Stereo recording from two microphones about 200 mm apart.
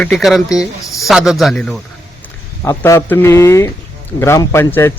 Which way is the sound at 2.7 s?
15° left (ahead or behind).